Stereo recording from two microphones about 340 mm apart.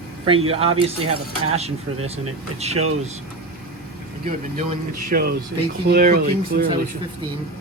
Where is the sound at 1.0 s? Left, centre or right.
Right.